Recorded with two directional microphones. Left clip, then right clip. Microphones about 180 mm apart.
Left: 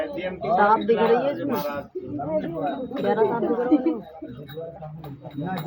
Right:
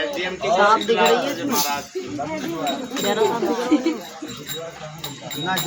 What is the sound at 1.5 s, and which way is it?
Speech, 10° right (ahead or behind).